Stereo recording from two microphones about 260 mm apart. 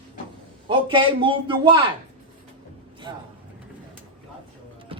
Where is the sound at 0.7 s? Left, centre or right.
Centre.